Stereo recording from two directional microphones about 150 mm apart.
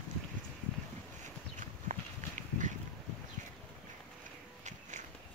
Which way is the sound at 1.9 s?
55° right (ahead or behind).